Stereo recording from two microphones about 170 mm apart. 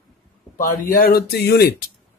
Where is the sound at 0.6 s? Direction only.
55° left (ahead or behind).